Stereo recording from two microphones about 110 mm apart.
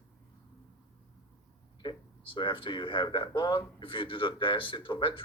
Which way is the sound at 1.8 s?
50° left (ahead or behind).